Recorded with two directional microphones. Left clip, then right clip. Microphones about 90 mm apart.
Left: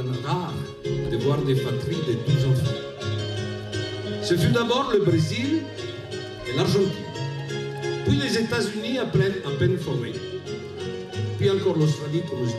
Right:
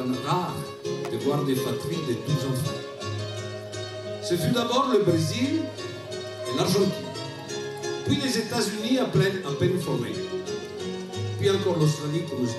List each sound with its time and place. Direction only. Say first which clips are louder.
0.8 s speech: left 2 dB; 35° right (ahead or behind)
4.3 s speech: left 3 dB; 35° right (ahead or behind)
6.5 s speech: left 2 dB; 35° right (ahead or behind)
7.8 s speech: left 2 dB; 35° right (ahead or behind)
11.4 s speech: left 1 dB; 35° right (ahead or behind)